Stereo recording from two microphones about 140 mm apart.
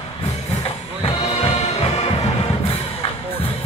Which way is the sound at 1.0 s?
40° left (ahead or behind).